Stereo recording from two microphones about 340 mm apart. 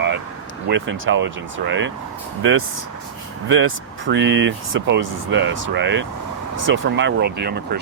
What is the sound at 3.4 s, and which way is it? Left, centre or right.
Speech, right.